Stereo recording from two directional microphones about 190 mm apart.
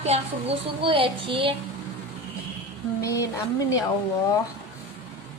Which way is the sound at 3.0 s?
15° left (ahead or behind).